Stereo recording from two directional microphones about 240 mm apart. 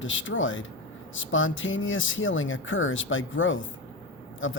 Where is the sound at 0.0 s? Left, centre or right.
Left.